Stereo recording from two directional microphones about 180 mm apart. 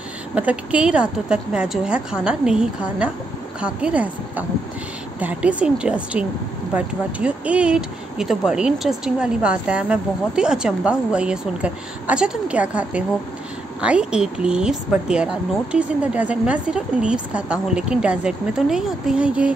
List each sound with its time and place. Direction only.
0.3 s speech: 5° right (ahead or behind)